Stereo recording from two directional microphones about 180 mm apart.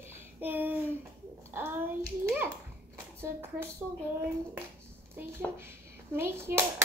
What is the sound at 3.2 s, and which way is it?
Speech, 10° right (ahead or behind).